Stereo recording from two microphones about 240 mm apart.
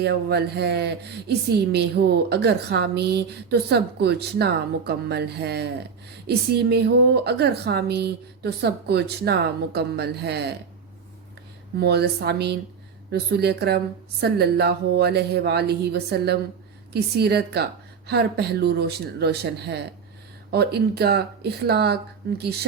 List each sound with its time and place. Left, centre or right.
0.0 s a woman's voice: right
11.8 s a woman's voice: right